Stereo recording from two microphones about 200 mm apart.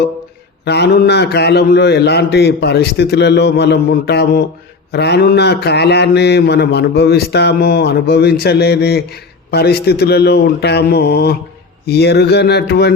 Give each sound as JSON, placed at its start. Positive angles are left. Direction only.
{"t": 0.6, "sound": "mantra", "side_deg": 55}